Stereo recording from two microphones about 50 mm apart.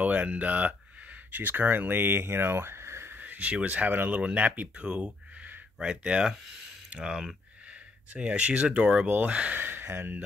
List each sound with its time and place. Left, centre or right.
0.0 s speech: right
3.2 s speech: right
4.2 s speech: right
4.8 s a sound: right
5.8 s speech: centre
7.6 s speech: right
9.0 s speech: right
9.6 s speech: right